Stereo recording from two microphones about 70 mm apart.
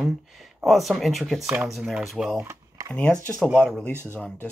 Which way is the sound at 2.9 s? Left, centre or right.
Left.